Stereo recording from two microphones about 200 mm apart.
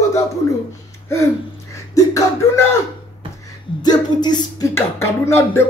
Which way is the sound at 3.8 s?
20° left (ahead or behind).